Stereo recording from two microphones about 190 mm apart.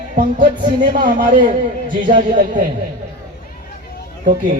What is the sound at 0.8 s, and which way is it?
Speech, 45° right (ahead or behind).